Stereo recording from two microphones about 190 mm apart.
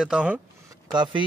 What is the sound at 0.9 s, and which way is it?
Speech, 25° right (ahead or behind).